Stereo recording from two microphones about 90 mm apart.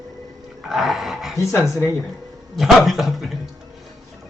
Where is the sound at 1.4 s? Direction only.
35° left (ahead or behind).